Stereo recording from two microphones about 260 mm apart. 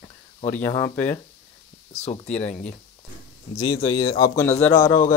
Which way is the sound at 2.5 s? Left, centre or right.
Centre.